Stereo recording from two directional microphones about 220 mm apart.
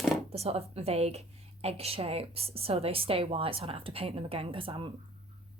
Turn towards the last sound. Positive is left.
turn(degrees=-25)  # may be behind; listen again after turning